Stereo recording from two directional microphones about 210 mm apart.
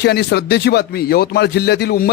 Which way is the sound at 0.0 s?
50° left (ahead or behind).